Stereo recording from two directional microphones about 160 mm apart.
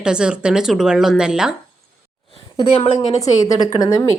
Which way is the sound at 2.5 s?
40° left (ahead or behind).